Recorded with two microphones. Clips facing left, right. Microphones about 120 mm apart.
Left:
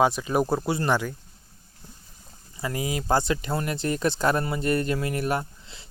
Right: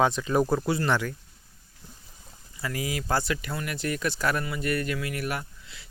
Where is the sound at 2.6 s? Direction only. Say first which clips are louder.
Left 3 dB; 25° left (ahead or behind).